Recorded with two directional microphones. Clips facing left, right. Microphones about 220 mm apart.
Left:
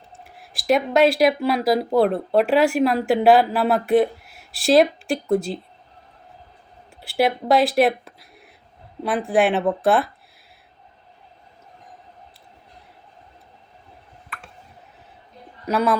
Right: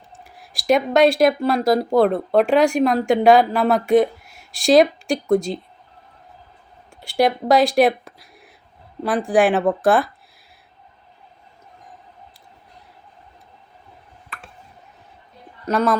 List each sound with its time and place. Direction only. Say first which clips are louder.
0.3 s speech: right 2 dB; centre (ahead or behind)
7.0 s speech: right 2 dB; 5° left (ahead or behind)
15.6 s speech: right 1 dB; 5° left (ahead or behind)